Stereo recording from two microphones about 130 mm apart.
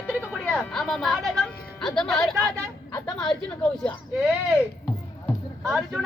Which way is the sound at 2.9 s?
30° left (ahead or behind).